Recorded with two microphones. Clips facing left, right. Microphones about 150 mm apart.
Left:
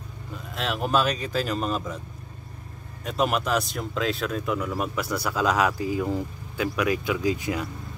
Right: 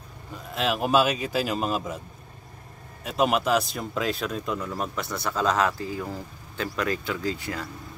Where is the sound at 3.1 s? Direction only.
Centre (ahead or behind).